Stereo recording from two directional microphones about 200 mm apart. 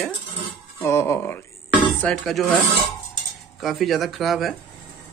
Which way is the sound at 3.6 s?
Centre (ahead or behind).